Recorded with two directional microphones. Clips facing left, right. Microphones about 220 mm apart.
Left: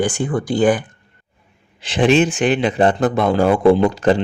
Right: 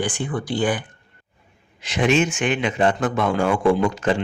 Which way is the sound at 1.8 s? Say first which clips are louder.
Left 5 dB; 30° left (ahead or behind).